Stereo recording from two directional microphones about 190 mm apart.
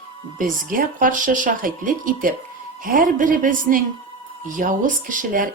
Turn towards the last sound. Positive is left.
turn(degrees=-45)  # may be behind; listen again after turning